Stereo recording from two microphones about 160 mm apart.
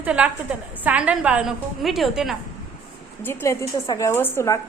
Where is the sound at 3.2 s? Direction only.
15° left (ahead or behind).